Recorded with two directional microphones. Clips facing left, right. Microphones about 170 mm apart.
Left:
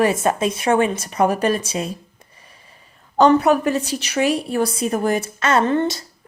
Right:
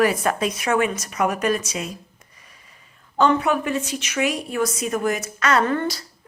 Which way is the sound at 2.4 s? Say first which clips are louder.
Left 3 dB; 30° left (ahead or behind).